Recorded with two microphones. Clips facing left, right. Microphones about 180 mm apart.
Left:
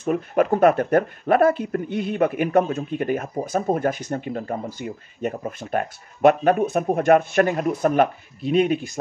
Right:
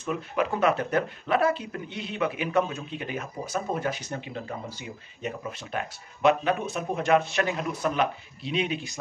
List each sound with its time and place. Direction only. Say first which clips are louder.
0.0 s speech: left 7 dB; 50° left (ahead or behind)